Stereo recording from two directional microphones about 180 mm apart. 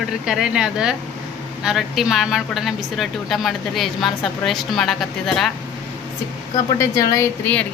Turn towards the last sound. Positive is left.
turn(degrees=10)  # may be behind; listen again after turning